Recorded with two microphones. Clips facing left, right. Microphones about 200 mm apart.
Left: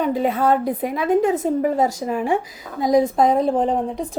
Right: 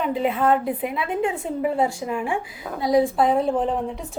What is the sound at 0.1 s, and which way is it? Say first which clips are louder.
A woman's voice: left 2 dB; 40° left (ahead or behind).